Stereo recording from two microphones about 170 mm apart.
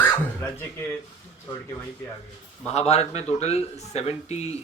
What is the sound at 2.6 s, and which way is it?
Speech, 40° left (ahead or behind).